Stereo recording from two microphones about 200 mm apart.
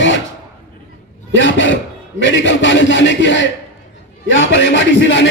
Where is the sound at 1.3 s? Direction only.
65° left (ahead or behind).